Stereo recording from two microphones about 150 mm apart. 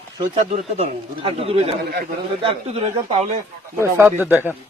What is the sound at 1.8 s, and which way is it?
Speech, 90° right.